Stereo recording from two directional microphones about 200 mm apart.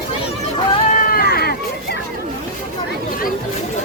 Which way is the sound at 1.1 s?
50° left (ahead or behind).